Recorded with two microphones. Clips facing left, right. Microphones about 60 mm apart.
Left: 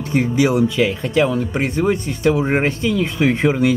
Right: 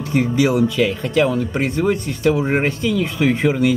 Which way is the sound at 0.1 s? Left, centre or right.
Centre.